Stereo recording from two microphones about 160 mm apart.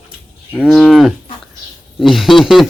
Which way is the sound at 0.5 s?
5° left (ahead or behind).